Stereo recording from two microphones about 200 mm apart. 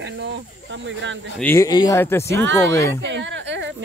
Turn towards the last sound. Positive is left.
turn(degrees=-65)  # may be behind; listen again after turning